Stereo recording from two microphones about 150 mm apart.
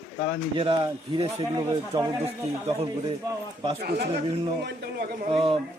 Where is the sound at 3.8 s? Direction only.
90° right.